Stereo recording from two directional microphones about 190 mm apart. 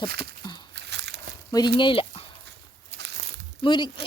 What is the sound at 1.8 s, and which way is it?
Speech, 25° left (ahead or behind).